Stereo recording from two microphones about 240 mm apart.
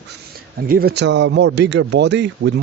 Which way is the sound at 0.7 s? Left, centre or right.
Right.